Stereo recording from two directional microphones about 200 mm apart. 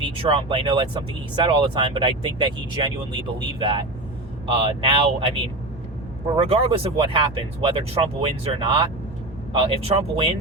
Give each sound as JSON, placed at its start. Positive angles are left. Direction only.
{"t": 0.2, "sound": "speech", "side_deg": -25}
{"t": 6.3, "sound": "speech", "side_deg": -30}